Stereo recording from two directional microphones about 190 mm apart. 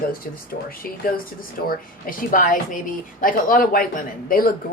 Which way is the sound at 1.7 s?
45° left (ahead or behind).